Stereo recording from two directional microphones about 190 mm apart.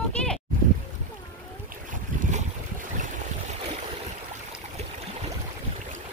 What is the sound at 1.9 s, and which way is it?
Boat, 40° right (ahead or behind).